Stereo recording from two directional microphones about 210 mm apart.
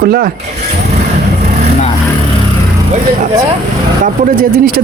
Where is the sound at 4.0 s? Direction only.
40° right (ahead or behind).